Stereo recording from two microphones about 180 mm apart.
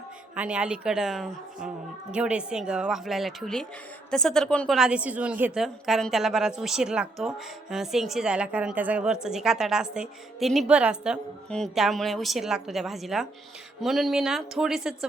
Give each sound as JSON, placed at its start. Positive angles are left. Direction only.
{"t": 0.3, "sound": "a woman's voice", "side_deg": -5}